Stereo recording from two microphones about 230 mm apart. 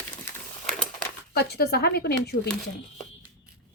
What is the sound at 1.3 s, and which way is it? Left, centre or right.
Speech, left.